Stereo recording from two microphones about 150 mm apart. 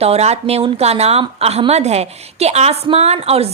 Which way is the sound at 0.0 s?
45° right (ahead or behind).